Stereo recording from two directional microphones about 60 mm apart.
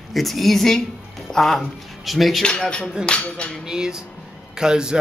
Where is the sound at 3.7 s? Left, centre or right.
Centre.